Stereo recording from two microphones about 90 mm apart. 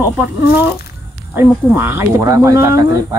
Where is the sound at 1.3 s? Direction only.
25° right (ahead or behind).